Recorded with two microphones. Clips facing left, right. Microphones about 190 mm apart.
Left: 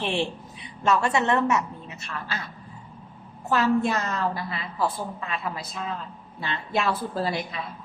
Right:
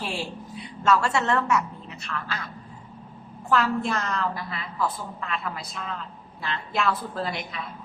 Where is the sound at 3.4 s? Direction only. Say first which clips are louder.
Left 2 dB; 20° left (ahead or behind).